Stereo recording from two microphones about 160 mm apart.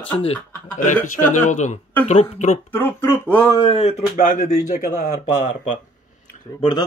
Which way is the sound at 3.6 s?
35° left (ahead or behind).